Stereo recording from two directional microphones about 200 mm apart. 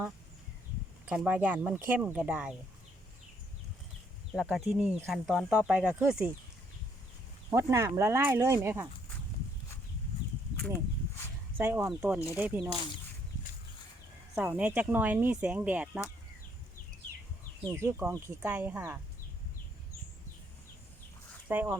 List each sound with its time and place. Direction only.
1.0 s speech: 5° right (ahead or behind)
4.3 s speech: centre (ahead or behind)
7.5 s speech: 15° right (ahead or behind)
11.5 s speech: 10° right (ahead or behind)
14.3 s speech: 5° right (ahead or behind)
17.7 s speech: 15° right (ahead or behind)
21.4 s speech: 10° right (ahead or behind)